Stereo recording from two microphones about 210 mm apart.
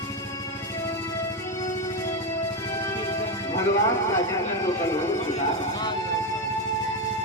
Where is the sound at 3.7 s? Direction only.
15° left (ahead or behind).